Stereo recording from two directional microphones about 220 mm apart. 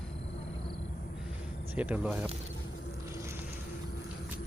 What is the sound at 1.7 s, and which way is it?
Speech, 5° right (ahead or behind).